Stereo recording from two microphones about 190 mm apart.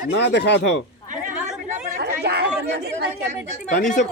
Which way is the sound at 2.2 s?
60° right (ahead or behind).